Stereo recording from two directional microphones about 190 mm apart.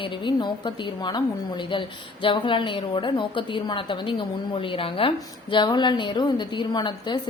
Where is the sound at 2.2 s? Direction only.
25° left (ahead or behind).